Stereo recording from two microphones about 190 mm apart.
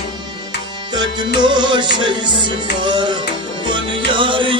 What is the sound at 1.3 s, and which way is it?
Music, 25° right (ahead or behind).